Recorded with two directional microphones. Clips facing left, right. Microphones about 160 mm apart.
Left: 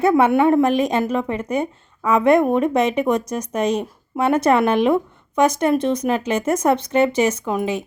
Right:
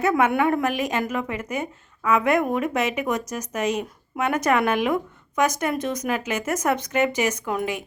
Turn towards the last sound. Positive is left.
turn(degrees=20)  # may be behind; listen again after turning